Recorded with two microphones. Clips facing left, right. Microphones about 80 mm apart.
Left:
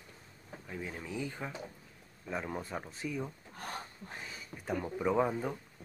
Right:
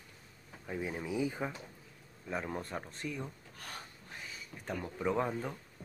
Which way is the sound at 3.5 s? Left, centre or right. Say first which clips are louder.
Left 5 dB; left.